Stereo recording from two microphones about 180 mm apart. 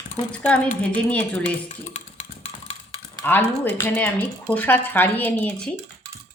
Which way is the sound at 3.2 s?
10° left (ahead or behind).